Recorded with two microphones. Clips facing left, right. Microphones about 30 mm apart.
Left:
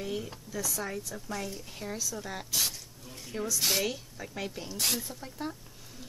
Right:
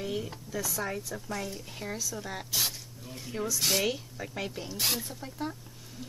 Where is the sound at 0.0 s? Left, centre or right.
Centre.